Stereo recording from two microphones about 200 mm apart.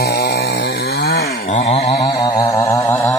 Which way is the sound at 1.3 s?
40° left (ahead or behind).